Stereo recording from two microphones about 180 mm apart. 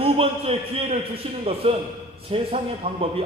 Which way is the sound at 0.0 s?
30° right (ahead or behind).